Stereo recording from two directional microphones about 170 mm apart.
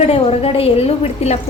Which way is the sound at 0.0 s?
35° left (ahead or behind).